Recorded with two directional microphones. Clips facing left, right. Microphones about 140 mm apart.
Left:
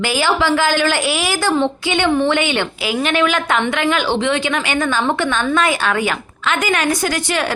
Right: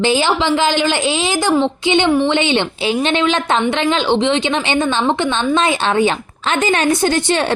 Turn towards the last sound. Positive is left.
turn(degrees=-30)  # may be behind; listen again after turning